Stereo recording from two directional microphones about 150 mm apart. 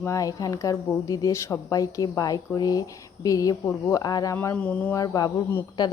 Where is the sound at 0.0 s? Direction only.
20° left (ahead or behind).